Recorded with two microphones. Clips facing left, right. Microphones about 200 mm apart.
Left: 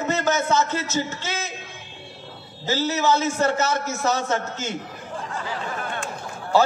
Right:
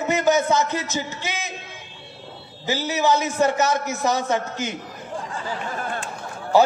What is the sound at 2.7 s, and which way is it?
A man's voice, 15° right (ahead or behind).